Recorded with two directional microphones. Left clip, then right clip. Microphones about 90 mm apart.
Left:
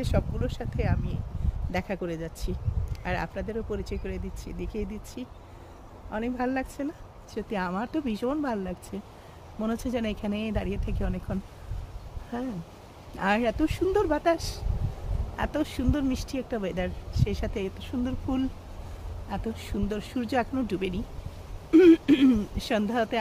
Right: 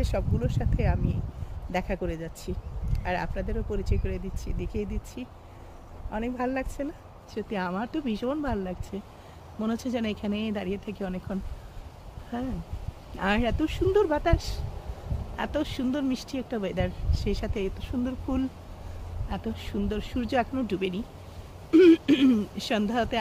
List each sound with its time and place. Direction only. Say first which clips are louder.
0.0 s speech: even; 25° left (ahead or behind)
17.1 s speech: right 1 dB; 30° left (ahead or behind)